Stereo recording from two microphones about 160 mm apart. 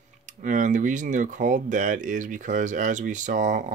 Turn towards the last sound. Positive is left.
turn(degrees=-55)  # may be behind; listen again after turning